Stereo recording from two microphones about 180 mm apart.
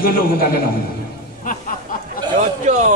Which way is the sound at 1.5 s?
50° left (ahead or behind).